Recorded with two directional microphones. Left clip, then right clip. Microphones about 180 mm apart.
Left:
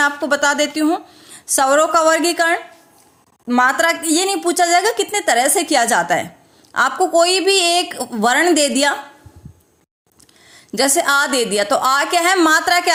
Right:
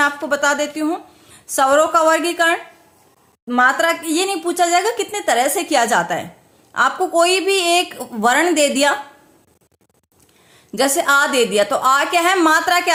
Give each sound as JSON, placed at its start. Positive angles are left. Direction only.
{"t": 0.0, "sound": "a woman's voice", "side_deg": 40}
{"t": 10.5, "sound": "a woman's voice", "side_deg": 35}